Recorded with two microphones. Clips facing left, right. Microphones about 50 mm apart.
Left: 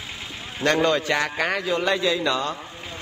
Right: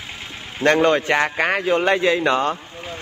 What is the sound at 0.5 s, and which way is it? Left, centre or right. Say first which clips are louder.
A man's voice: right 4 dB; right.